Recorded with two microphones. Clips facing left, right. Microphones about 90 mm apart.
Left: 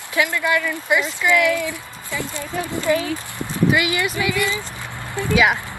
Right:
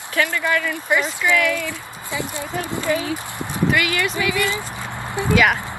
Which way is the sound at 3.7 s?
15° left (ahead or behind).